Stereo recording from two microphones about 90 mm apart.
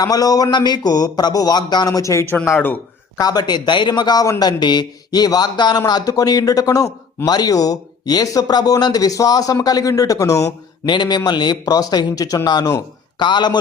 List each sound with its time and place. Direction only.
0.0 s a man's voice: 45° left (ahead or behind)
2.2 s speech: 25° left (ahead or behind)
3.2 s a man's voice: 50° left (ahead or behind)
10.8 s a man's voice: 55° left (ahead or behind)